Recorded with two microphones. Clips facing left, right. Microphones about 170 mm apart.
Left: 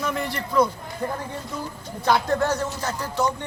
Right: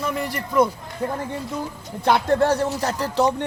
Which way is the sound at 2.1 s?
30° right (ahead or behind).